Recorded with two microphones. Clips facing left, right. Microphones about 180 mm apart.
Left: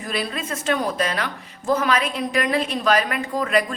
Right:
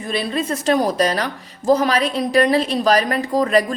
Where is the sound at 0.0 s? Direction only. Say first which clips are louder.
Right 5 dB; 30° right (ahead or behind).